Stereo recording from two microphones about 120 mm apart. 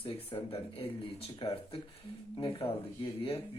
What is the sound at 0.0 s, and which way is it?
Speech, 50° left (ahead or behind).